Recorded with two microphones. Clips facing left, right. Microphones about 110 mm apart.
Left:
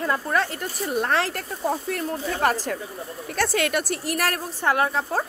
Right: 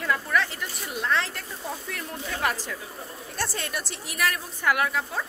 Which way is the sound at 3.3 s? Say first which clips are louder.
Left 9 dB; 70° left (ahead or behind).